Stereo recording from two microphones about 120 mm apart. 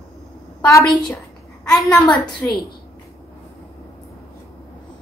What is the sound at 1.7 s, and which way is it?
Speech, 5° left (ahead or behind).